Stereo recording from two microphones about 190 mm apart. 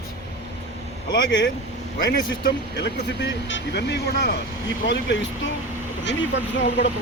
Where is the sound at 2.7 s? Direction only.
65° left (ahead or behind).